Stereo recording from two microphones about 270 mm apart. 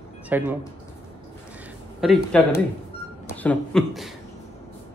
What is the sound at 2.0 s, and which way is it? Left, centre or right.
A woman's voice, centre.